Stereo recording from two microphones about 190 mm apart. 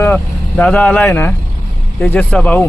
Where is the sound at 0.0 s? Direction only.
10° left (ahead or behind).